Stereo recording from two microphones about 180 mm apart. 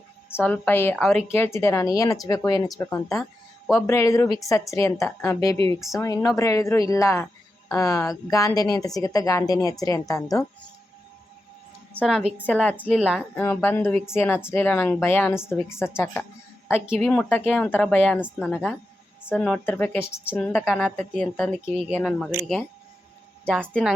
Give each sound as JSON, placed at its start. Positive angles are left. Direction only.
{"t": 0.3, "sound": "a woman's voice", "side_deg": 10}
{"t": 11.9, "sound": "a woman's voice", "side_deg": 0}
{"t": 13.0, "sound": "a woman's voice", "side_deg": -5}
{"t": 13.3, "sound": "a woman's voice", "side_deg": 10}
{"t": 16.8, "sound": "a woman's voice", "side_deg": -5}
{"t": 17.1, "sound": "a woman's voice", "side_deg": 10}
{"t": 23.5, "sound": "a woman's voice", "side_deg": 5}